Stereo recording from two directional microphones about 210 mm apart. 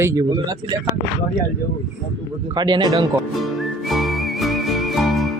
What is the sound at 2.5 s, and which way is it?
Speech, 20° right (ahead or behind).